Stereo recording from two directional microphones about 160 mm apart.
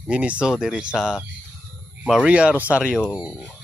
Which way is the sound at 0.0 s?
5° right (ahead or behind).